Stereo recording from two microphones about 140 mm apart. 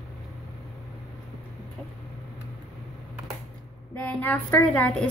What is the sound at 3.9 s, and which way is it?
A woman's voice, 10° left (ahead or behind).